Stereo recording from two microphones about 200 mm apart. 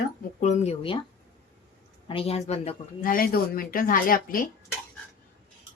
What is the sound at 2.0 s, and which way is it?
Speech, 30° left (ahead or behind).